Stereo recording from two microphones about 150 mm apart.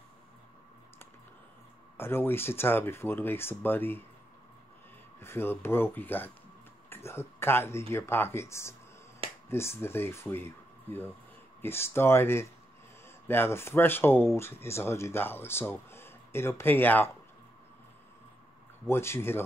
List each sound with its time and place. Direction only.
2.0 s speech: 15° left (ahead or behind)
5.2 s a man's voice: 15° left (ahead or behind)
18.9 s speech: 15° left (ahead or behind)